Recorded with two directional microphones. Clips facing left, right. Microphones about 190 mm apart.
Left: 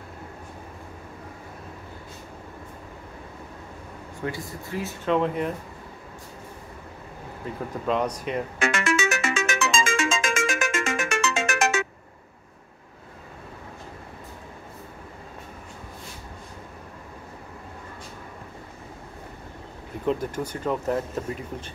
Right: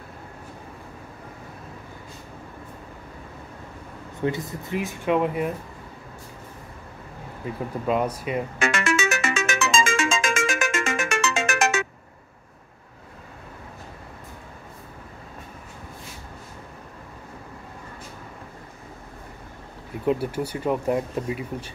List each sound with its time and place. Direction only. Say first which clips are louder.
4.2 s speech: right 6 dB; 20° right (ahead or behind)
7.8 s speech: right 1 dB; 5° right (ahead or behind)
8.5 s music: even; 65° right (ahead or behind)
20.1 s speech: right 2 dB; 10° right (ahead or behind)